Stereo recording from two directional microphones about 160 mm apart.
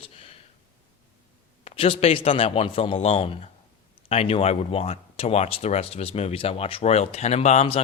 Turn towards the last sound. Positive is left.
turn(degrees=40)  # may be behind; listen again after turning